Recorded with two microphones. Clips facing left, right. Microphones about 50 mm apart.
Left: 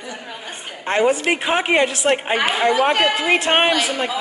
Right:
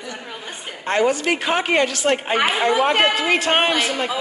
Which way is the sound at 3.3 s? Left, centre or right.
Centre.